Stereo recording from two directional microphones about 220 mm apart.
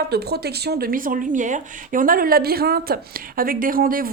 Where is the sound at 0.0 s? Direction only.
45° right (ahead or behind).